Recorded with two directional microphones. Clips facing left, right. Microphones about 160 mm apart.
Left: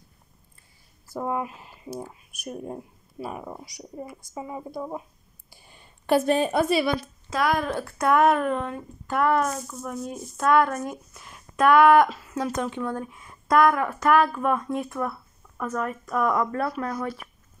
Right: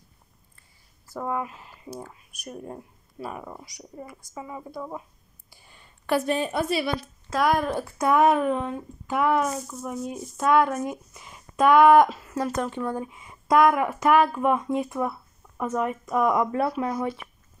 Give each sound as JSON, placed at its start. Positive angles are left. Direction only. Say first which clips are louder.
{"t": 1.1, "sound": "speech", "louder": "left 1 dB", "side_deg": 15}
{"t": 4.6, "sound": "speech", "louder": "left 2 dB", "side_deg": 10}
{"t": 6.0, "sound": "a woman's voice", "louder": "left 3 dB", "side_deg": 25}
{"t": 6.3, "sound": "a woman's voice", "louder": "left 4 dB", "side_deg": 45}
{"t": 7.2, "sound": "speech", "louder": "right 2 dB", "side_deg": -10}
{"t": 11.7, "sound": "speech", "louder": "right 1 dB", "side_deg": -15}
{"t": 12.4, "sound": "speech", "louder": "even", "side_deg": -5}